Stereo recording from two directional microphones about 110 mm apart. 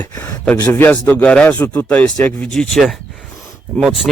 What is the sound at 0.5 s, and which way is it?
Speech, 20° left (ahead or behind).